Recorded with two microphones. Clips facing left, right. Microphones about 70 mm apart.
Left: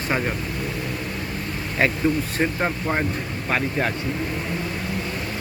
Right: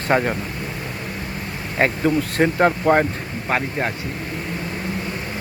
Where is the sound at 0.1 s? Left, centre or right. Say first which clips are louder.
Right 7 dB; right.